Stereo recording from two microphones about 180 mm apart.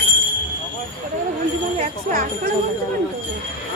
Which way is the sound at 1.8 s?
50° right (ahead or behind).